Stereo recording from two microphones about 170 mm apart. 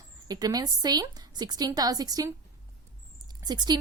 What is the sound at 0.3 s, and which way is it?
A woman's voice, 25° right (ahead or behind).